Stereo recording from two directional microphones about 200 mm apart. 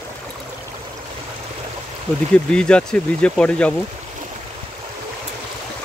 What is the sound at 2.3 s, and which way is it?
Speech, 5° left (ahead or behind).